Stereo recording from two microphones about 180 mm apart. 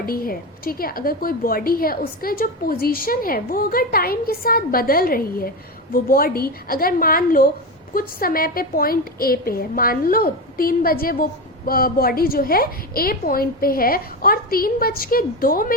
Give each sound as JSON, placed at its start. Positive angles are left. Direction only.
{"t": 0.0, "sound": "a woman's voice", "side_deg": 55}